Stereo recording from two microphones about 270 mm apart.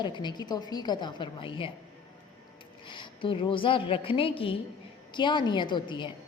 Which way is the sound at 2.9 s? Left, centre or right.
Centre.